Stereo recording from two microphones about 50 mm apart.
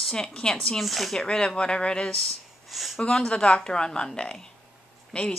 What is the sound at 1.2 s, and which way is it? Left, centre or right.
Speech, centre.